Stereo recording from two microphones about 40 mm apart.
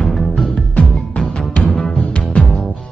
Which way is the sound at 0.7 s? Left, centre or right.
Left.